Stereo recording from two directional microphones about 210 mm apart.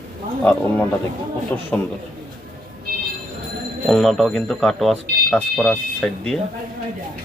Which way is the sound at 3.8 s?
Centre (ahead or behind).